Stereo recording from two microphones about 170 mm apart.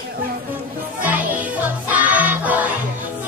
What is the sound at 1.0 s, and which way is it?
Music, 10° right (ahead or behind).